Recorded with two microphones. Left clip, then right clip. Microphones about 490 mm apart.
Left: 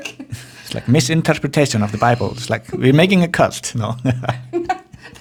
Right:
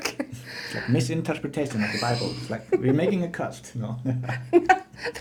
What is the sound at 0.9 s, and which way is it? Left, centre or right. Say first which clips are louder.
Speech: left 12 dB; left.